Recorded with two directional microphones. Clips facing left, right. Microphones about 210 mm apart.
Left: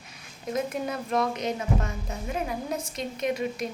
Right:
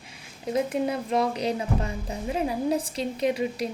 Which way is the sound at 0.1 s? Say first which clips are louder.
Right 3 dB; 30° right (ahead or behind).